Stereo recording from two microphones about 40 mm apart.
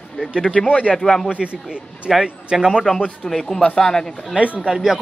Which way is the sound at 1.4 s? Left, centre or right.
Right.